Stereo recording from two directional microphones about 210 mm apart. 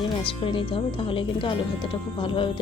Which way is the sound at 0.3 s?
25° left (ahead or behind).